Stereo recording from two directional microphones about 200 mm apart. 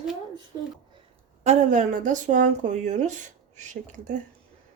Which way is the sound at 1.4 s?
35° right (ahead or behind).